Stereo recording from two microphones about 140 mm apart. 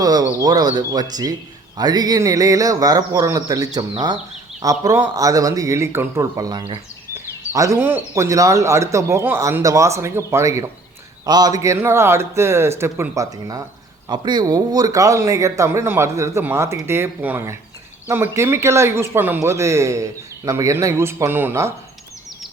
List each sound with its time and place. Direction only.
0.0 s speech: 30° right (ahead or behind)